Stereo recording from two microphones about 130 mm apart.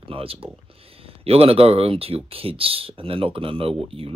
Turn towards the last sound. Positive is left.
turn(degrees=-45)  # may be behind; listen again after turning